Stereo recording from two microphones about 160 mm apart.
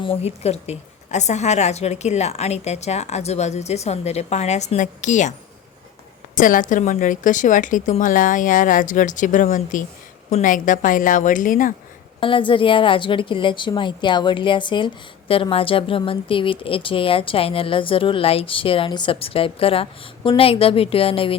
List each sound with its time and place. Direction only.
0.0 s a woman's voice: 40° left (ahead or behind)
6.3 s a woman's voice: 55° left (ahead or behind)
12.2 s speech: 30° left (ahead or behind)